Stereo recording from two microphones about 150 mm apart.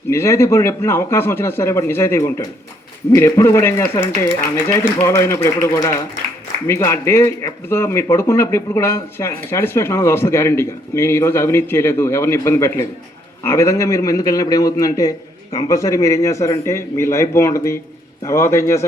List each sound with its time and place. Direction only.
0.1 s a man's voice: 20° left (ahead or behind)